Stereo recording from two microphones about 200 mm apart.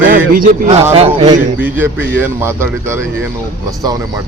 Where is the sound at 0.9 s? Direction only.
30° right (ahead or behind).